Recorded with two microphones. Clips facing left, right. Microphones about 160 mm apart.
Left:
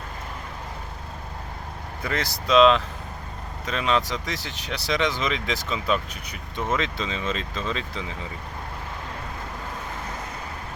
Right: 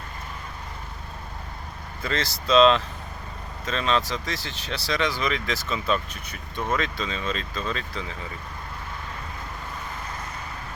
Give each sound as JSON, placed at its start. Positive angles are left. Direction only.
{"t": 2.0, "sound": "speech", "side_deg": 15}
{"t": 2.6, "sound": "speech", "side_deg": 5}